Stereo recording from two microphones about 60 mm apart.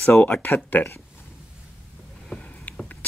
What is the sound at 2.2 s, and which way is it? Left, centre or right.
Rowboat, centre.